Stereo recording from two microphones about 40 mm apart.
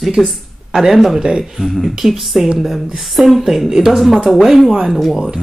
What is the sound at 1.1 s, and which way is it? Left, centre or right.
A woman's voice, centre.